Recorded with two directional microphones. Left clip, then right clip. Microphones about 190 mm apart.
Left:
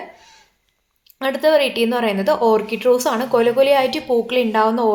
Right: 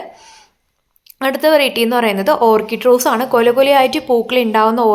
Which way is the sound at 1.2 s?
25° right (ahead or behind).